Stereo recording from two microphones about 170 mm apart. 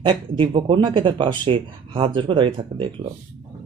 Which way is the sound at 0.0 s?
30° right (ahead or behind).